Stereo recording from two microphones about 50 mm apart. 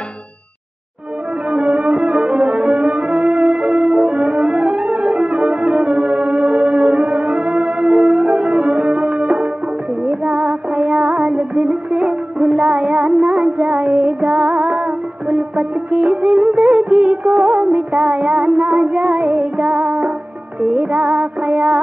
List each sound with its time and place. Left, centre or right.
1.5 s music: right